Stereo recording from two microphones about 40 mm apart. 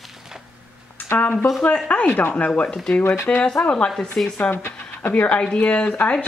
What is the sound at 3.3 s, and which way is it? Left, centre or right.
Speech, left.